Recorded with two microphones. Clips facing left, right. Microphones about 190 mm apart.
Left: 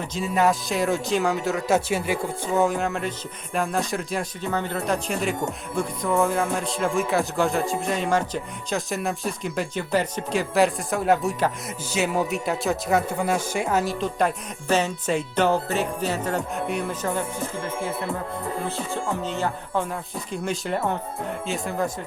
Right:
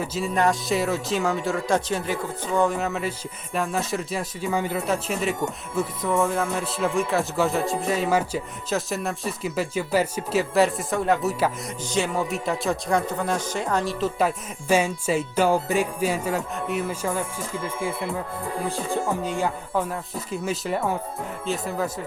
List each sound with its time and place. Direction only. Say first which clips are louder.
0.0 s speech: left 1 dB; 5° right (ahead or behind)
18.6 s speech: right 2 dB; 15° right (ahead or behind)